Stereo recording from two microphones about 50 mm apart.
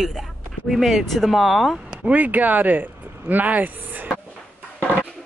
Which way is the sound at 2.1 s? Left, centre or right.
Right.